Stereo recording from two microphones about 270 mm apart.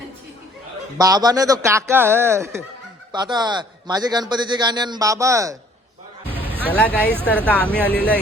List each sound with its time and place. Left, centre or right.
0.9 s a man's voice: centre
6.3 s music: centre
6.7 s speech: centre